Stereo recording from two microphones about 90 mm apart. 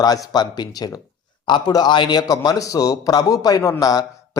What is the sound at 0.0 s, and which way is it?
A man's voice, 45° left (ahead or behind).